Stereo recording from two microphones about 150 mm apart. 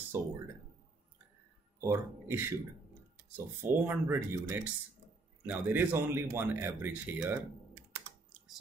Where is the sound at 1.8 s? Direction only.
15° right (ahead or behind).